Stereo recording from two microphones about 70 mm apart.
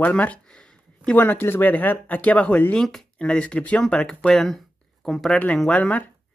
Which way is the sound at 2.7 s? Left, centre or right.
Centre.